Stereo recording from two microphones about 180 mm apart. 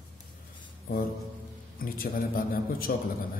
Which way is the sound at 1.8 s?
55° left (ahead or behind).